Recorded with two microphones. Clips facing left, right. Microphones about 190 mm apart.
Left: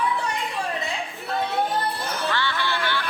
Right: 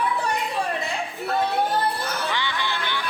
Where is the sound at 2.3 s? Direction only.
15° right (ahead or behind).